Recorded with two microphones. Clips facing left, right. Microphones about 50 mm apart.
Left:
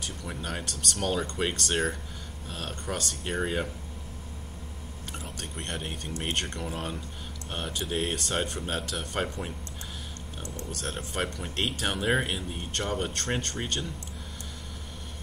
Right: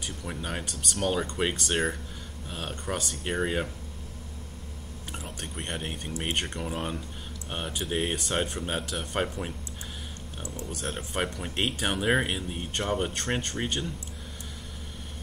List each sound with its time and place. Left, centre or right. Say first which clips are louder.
0.0 s speech: right 1 dB; centre
5.2 s speech: right 1 dB; centre
10.7 s speech: right 1 dB; centre